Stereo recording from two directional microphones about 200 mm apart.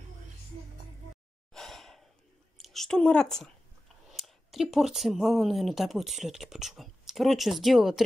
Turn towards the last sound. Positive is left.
turn(degrees=0)  # may be behind; listen again after turning